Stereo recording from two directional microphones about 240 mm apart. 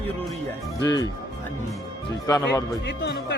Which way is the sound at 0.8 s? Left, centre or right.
Centre.